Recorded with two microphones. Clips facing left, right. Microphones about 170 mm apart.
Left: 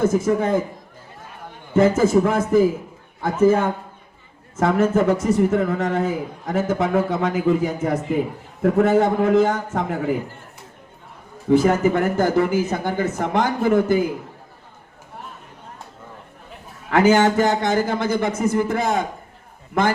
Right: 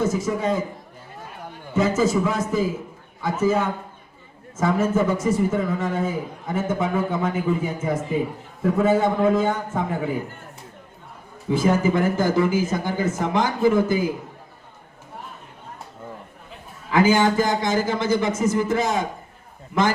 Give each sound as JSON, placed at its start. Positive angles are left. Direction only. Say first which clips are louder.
{"t": 0.0, "sound": "speech", "louder": "left 4 dB", "side_deg": 55}
{"t": 1.7, "sound": "speech", "louder": "left 5 dB", "side_deg": 55}
{"t": 4.5, "sound": "a man's voice", "louder": "left 3 dB", "side_deg": 65}
{"t": 11.4, "sound": "speech", "louder": "left 4 dB", "side_deg": 65}
{"t": 16.9, "sound": "speech", "louder": "left 2 dB", "side_deg": 70}